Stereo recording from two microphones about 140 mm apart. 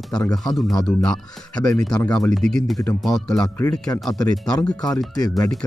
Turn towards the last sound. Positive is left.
turn(degrees=25)  # may be behind; listen again after turning